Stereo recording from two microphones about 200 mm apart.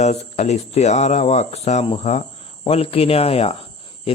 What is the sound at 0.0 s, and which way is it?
Speech, 35° left (ahead or behind).